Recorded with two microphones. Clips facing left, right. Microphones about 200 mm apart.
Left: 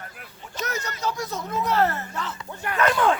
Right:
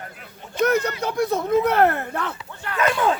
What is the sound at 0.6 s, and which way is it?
Speech, 55° right (ahead or behind).